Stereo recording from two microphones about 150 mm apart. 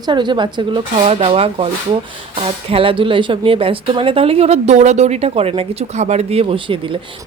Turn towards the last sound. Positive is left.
turn(degrees=-35)  # may be behind; listen again after turning